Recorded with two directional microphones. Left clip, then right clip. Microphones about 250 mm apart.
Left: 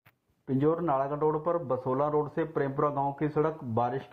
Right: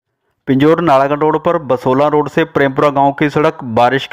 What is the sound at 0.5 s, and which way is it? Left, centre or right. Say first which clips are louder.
A man's voice: right 17 dB; right.